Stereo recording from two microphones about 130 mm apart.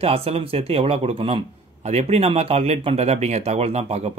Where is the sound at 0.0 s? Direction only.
50° right (ahead or behind).